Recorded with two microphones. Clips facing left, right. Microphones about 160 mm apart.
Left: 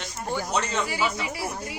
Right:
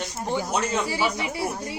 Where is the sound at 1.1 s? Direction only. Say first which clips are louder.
Right 3 dB; 25° right (ahead or behind).